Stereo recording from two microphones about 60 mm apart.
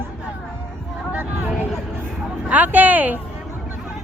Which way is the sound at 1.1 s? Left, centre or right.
Right.